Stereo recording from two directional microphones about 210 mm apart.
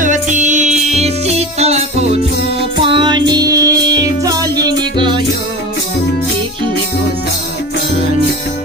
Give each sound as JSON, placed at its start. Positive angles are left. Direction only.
{"t": 0.0, "sound": "music", "side_deg": -35}